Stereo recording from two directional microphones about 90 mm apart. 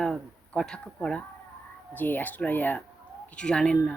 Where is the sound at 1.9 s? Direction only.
20° left (ahead or behind).